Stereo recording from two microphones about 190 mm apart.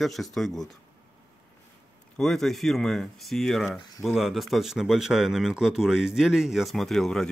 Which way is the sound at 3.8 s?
20° left (ahead or behind).